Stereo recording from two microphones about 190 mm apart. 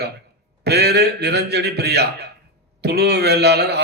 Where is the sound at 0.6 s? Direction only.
60° right (ahead or behind).